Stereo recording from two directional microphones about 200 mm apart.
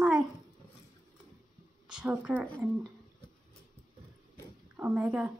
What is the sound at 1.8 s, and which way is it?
Speech, 5° right (ahead or behind).